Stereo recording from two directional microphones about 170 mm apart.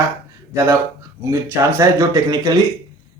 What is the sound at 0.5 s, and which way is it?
Speech, 15° right (ahead or behind).